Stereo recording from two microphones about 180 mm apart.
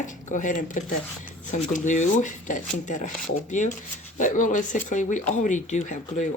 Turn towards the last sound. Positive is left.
turn(degrees=40)  # may be behind; listen again after turning